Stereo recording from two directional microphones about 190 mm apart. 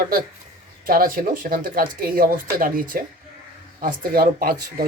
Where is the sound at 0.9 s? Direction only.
50° right (ahead or behind).